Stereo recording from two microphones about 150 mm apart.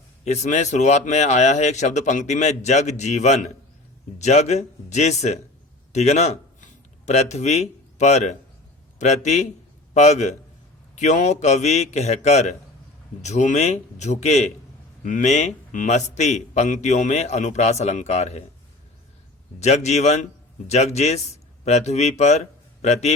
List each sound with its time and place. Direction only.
0.3 s a man's voice: 50° left (ahead or behind)
19.5 s a man's voice: 50° left (ahead or behind)